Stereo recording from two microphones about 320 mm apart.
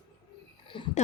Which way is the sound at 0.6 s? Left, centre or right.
Centre.